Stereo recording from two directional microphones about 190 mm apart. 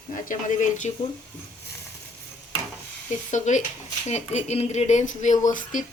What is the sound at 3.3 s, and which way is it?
Speech, 40° left (ahead or behind).